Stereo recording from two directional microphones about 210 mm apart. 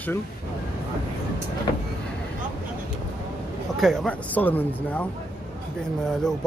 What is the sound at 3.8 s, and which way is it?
Speech, 5° left (ahead or behind).